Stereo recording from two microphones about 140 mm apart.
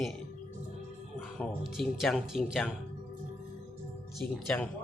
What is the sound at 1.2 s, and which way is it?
Speech, 5° left (ahead or behind).